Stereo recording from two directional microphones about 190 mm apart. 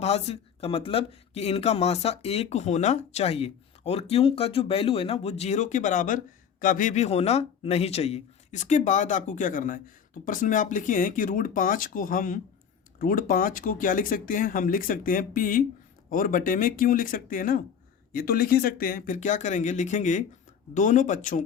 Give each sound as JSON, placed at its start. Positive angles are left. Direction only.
{"t": 0.0, "sound": "speech", "side_deg": 35}